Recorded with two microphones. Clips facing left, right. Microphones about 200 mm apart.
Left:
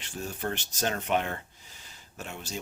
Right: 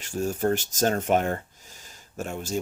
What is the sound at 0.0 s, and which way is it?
Speech, 45° right (ahead or behind).